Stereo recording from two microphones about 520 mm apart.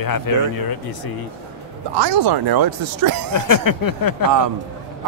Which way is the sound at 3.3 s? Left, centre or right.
Left.